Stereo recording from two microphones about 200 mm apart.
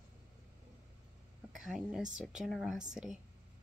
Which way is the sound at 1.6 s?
5° right (ahead or behind).